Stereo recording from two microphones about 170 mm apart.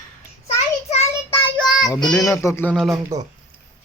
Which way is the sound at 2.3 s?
15° left (ahead or behind).